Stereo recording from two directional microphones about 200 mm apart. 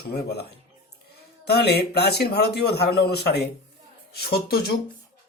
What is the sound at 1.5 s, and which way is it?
Speech, 55° left (ahead or behind).